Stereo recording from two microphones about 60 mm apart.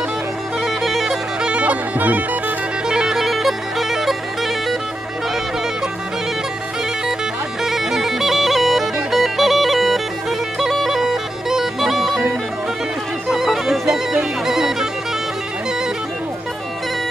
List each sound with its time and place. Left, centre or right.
0.7 s bagpipes: centre; by 2.2 s right
2.9 s bagpipes: centre
7.6 s bagpipes: centre
13.3 s bagpipes: centre